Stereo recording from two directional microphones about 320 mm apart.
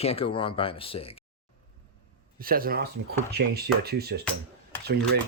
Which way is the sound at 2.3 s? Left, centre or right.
Right.